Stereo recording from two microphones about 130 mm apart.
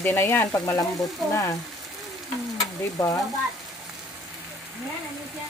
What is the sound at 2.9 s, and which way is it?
Speech, 25° left (ahead or behind).